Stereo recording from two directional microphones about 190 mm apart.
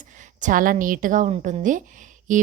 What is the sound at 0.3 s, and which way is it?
A woman's voice, 45° right (ahead or behind).